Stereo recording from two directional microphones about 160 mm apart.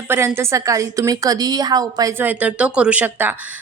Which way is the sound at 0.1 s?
15° right (ahead or behind).